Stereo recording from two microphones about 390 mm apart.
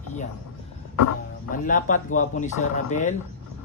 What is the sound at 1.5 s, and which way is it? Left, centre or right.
Speech, centre.